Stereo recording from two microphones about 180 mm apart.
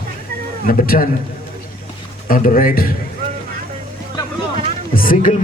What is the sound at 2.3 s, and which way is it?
Speech, 50° left (ahead or behind).